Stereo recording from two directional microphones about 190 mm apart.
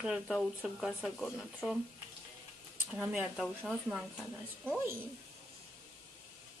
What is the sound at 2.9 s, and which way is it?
Speech, 5° right (ahead or behind).